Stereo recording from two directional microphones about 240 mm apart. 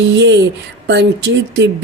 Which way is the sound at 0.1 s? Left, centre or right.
Right.